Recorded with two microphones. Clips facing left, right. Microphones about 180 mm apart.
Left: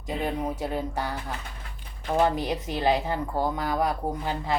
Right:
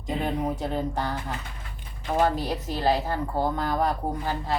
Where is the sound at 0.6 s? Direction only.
10° left (ahead or behind).